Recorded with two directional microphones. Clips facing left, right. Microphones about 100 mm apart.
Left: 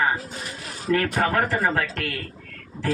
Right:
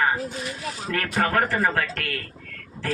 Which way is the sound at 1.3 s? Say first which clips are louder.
Even; 20° left (ahead or behind).